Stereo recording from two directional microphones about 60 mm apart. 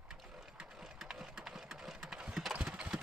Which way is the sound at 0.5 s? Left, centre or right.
Centre.